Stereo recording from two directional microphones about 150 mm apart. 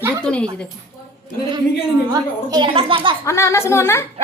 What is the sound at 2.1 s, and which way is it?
A woman's voice, 25° right (ahead or behind).